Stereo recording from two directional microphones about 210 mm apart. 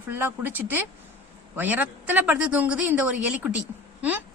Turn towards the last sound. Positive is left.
turn(degrees=-5)  # may be behind; listen again after turning